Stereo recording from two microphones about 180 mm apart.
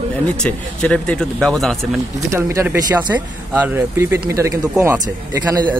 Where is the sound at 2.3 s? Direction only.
15° right (ahead or behind).